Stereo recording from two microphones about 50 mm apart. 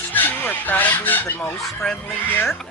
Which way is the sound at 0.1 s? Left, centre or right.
Left.